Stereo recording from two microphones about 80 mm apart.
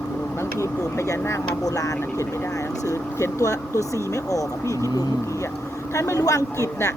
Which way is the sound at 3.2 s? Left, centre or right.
Left.